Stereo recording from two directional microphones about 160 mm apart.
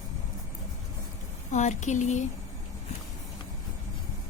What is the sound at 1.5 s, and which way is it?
Speech, 45° left (ahead or behind).